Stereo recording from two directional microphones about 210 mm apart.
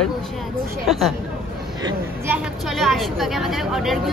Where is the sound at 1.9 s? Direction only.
10° right (ahead or behind).